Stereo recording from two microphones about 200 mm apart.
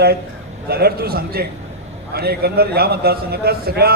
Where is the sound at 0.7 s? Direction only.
50° right (ahead or behind).